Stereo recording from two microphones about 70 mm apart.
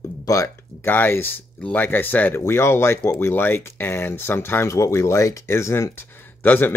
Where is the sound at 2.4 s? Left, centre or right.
Left.